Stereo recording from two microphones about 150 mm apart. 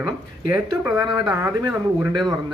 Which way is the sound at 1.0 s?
30° right (ahead or behind).